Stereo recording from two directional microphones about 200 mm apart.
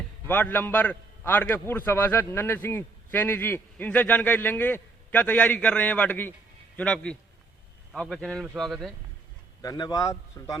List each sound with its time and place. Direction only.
0.3 s a man's voice: 10° left (ahead or behind)
9.6 s a man's voice: 20° left (ahead or behind)